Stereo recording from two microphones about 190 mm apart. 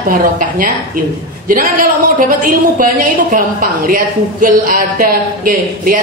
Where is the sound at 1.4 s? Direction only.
45° right (ahead or behind).